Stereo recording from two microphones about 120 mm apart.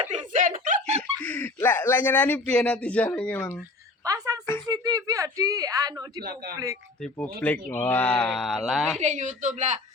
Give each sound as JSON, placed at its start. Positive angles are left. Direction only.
{"t": 0.1, "sound": "a sound", "side_deg": -85}
{"t": 1.2, "sound": "speech", "side_deg": 10}
{"t": 4.0, "sound": "a sound", "side_deg": -30}
{"t": 4.6, "sound": "speech", "side_deg": -30}
{"t": 7.0, "sound": "speech", "side_deg": 10}
{"t": 9.0, "sound": "a woman's voice", "side_deg": -90}